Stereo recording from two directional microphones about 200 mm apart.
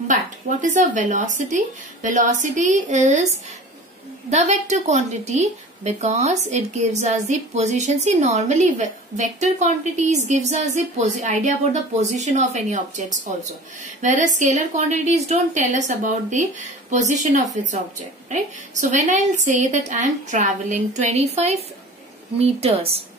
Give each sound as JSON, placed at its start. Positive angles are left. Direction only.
{"t": 0.7, "sound": "a woman's voice", "side_deg": -40}
{"t": 4.3, "sound": "a woman's voice", "side_deg": -35}